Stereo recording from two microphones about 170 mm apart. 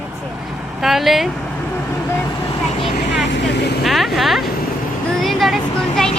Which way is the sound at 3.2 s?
90° left.